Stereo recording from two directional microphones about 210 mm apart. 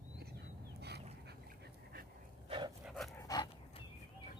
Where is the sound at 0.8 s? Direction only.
50° right (ahead or behind).